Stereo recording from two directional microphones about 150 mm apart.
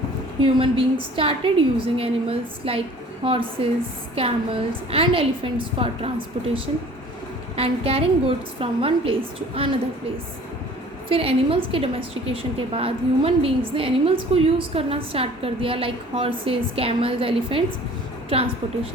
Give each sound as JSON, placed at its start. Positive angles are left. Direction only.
{"t": 0.4, "sound": "a woman's voice", "side_deg": -35}
{"t": 11.1, "sound": "a woman's voice", "side_deg": -40}